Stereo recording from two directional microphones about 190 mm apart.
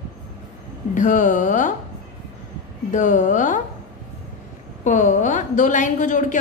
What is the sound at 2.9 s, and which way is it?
Speech, 40° left (ahead or behind).